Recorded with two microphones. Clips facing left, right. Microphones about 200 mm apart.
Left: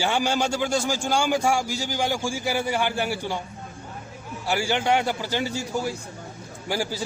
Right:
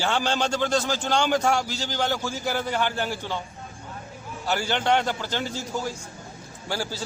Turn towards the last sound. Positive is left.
turn(degrees=15)  # may be behind; listen again after turning